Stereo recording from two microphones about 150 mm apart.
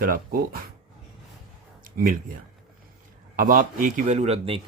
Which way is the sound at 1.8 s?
70° right (ahead or behind).